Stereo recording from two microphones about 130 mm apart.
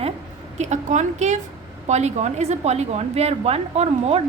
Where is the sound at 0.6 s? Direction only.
65° right (ahead or behind).